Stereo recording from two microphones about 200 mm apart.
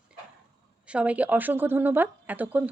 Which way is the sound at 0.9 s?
5° right (ahead or behind).